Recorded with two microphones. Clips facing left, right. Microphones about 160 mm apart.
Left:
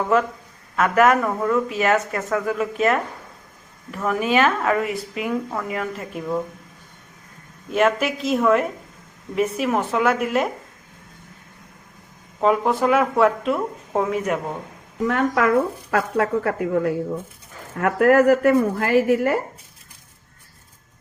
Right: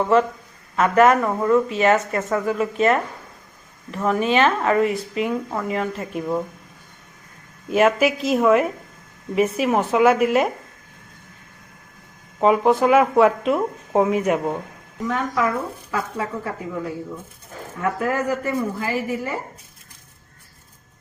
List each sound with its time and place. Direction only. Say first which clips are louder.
0.8 s speech: right 1 dB; centre (ahead or behind)
7.7 s speech: right 2 dB; 5° right (ahead or behind)
12.4 s speech: right 2 dB; 5° right (ahead or behind)
15.0 s speech: left 3 dB; 70° left (ahead or behind)